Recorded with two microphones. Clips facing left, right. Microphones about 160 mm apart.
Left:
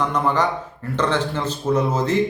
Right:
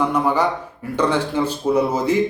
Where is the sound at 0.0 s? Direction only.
10° right (ahead or behind).